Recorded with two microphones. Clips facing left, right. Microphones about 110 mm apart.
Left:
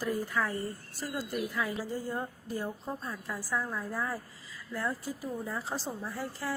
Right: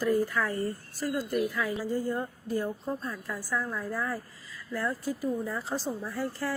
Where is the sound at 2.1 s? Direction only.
15° left (ahead or behind).